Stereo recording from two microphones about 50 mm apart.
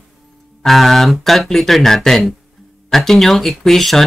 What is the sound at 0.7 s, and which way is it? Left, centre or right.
Speech, centre.